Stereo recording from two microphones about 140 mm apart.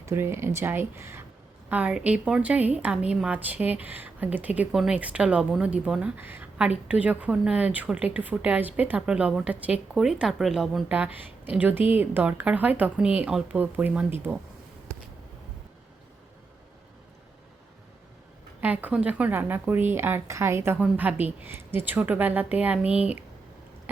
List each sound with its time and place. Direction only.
0.0 s a woman's voice: 20° right (ahead or behind)
18.6 s a woman's voice: 10° right (ahead or behind)